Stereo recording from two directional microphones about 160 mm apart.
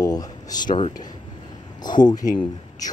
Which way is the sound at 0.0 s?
25° left (ahead or behind).